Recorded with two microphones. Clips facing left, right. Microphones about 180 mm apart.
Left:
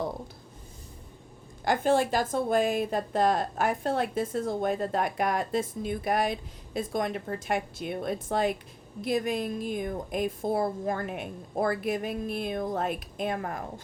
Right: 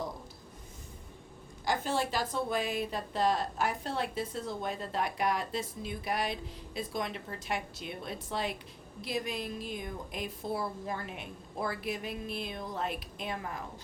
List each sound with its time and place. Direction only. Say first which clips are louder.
1.6 s speech: left 7 dB; 55° left (ahead or behind)